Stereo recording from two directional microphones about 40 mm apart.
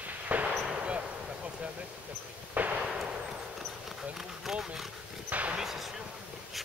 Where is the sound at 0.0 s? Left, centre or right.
Right.